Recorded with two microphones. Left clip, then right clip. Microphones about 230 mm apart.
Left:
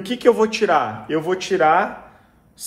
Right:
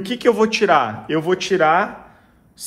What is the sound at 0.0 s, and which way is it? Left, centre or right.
Speech, right.